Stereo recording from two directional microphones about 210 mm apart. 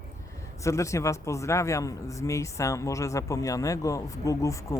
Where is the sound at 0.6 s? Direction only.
15° left (ahead or behind).